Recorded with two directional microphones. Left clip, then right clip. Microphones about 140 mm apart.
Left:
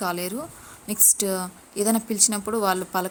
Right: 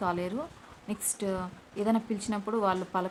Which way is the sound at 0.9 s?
60° left (ahead or behind).